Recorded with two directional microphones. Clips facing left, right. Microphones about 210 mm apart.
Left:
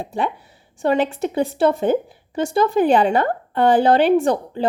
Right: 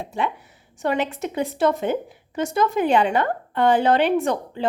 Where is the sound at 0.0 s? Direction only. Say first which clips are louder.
Left 2 dB; 35° left (ahead or behind).